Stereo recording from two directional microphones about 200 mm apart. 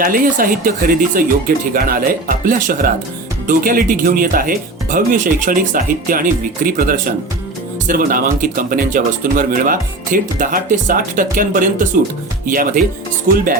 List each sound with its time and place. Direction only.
0.0 s speech: 45° right (ahead or behind)